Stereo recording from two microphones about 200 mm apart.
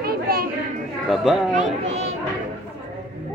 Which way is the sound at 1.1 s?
Centre (ahead or behind).